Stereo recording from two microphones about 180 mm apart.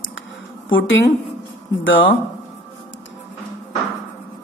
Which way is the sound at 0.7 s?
90° left.